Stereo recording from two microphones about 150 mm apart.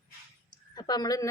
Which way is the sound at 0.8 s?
25° left (ahead or behind).